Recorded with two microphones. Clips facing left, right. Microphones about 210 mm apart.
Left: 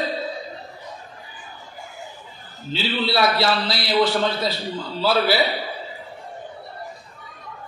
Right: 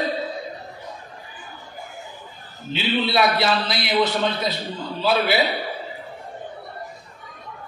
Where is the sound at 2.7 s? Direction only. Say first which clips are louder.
Right 1 dB; 20° right (ahead or behind).